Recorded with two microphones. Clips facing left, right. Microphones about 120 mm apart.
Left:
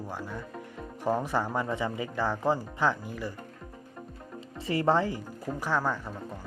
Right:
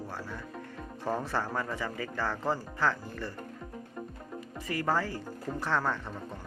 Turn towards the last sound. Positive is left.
turn(degrees=10)  # may be behind; listen again after turning